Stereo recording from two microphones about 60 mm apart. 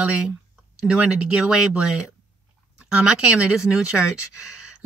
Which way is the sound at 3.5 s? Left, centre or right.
Centre.